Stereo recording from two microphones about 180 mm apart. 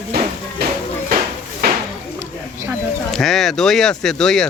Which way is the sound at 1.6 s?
60° right (ahead or behind).